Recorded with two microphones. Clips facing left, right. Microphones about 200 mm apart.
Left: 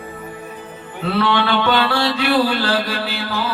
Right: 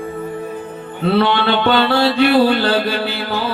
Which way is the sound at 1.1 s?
30° right (ahead or behind).